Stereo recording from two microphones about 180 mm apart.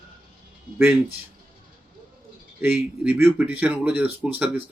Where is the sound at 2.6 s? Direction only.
10° right (ahead or behind).